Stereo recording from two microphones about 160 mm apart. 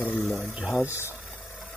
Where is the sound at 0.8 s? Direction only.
15° left (ahead or behind).